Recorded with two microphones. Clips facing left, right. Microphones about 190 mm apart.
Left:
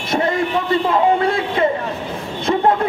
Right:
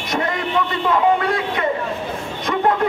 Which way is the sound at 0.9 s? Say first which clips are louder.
Right 1 dB; 30° left (ahead or behind).